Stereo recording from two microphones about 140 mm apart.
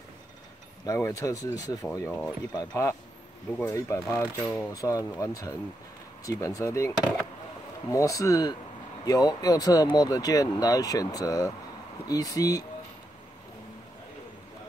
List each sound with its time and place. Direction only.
0.8 s speech: 20° left (ahead or behind)